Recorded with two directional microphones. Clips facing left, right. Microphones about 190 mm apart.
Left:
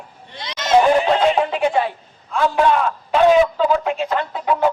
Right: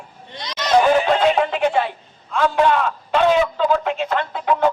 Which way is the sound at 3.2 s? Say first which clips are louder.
Left 4 dB; 5° left (ahead or behind).